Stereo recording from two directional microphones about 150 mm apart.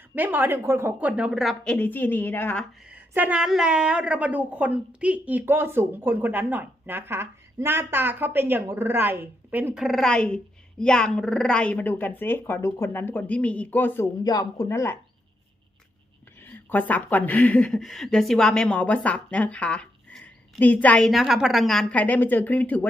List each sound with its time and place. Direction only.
0.1 s a woman's voice: 10° right (ahead or behind); by 2.6 s 15° left (ahead or behind)
2.9 s a woman's voice: 10° right (ahead or behind)
9.8 s speech: centre (ahead or behind)
14.3 s speech: 25° left (ahead or behind)
16.6 s speech: 10° left (ahead or behind)